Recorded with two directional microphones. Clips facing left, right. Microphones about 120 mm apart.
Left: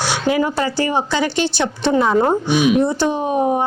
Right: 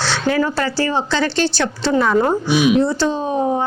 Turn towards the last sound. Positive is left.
turn(degrees=20)  # may be behind; listen again after turning